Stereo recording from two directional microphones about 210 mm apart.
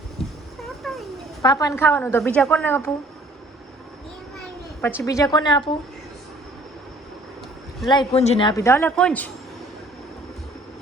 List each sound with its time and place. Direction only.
0.2 s a sound: centre (ahead or behind)
0.6 s cat: centre (ahead or behind)
1.4 s a woman's voice: 15° left (ahead or behind)
4.4 s a child's voice: 10° left (ahead or behind)
7.9 s a man's voice: 20° left (ahead or behind); by 9.3 s 5° left (ahead or behind)